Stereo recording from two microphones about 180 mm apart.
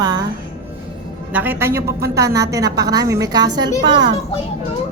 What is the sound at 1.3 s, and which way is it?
A man's voice, 10° right (ahead or behind).